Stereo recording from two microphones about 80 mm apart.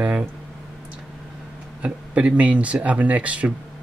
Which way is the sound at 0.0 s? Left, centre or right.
Centre.